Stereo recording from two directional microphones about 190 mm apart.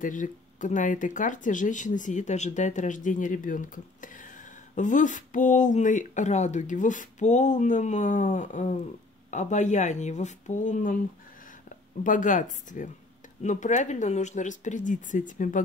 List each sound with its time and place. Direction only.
0.0 s speech: 45° left (ahead or behind)
12.0 s speech: 45° left (ahead or behind)